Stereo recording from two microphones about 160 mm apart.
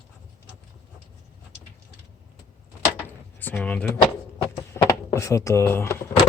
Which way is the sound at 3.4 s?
10° left (ahead or behind).